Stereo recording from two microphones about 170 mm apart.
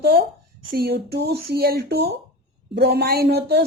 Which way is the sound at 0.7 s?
70° right (ahead or behind).